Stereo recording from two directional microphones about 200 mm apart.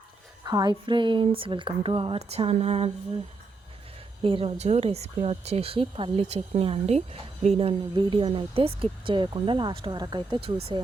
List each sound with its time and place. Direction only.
0.4 s speech: 20° right (ahead or behind)
4.2 s speech: 25° right (ahead or behind)